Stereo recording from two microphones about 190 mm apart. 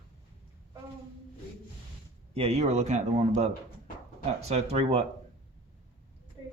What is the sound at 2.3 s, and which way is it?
Speech, 30° right (ahead or behind).